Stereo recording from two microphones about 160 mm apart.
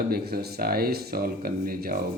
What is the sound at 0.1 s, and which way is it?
Speech, 75° right (ahead or behind).